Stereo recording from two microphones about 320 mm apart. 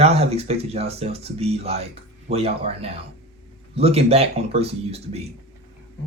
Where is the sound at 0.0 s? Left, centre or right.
Centre.